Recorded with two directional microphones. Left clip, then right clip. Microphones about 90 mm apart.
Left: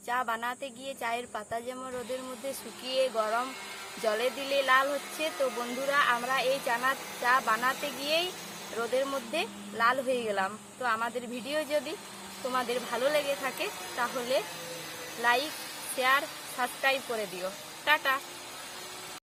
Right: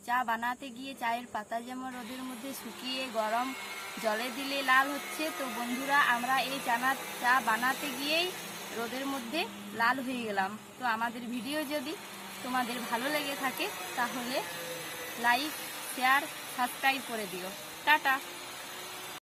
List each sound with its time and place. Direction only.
0.1 s a woman's voice: 40° left (ahead or behind)
2.8 s a woman's voice: 40° left (ahead or behind)
4.9 s speech: 40° right (ahead or behind)
5.9 s a woman's voice: 40° left (ahead or behind)
15.2 s a woman's voice: 35° left (ahead or behind)